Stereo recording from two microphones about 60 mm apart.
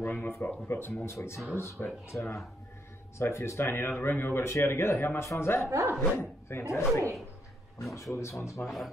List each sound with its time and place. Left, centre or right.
0.0 s a man's voice: left
5.7 s speech: right
6.1 s speech: left
8.1 s speech: left
8.6 s speech: centre